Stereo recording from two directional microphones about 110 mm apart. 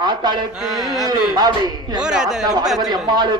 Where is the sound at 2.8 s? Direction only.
40° right (ahead or behind).